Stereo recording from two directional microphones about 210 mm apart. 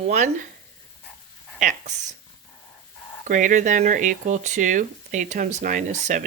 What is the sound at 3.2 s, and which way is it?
Speech, 40° right (ahead or behind).